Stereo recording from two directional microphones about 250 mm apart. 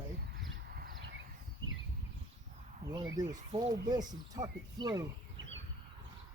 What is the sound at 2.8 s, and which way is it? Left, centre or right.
Speech, centre.